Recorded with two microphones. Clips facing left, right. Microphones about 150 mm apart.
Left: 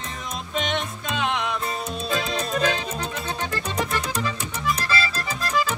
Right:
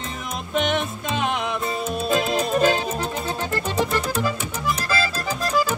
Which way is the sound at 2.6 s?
35° right (ahead or behind).